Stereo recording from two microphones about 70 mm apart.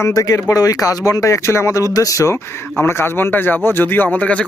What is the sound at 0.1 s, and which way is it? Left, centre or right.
Speech, left.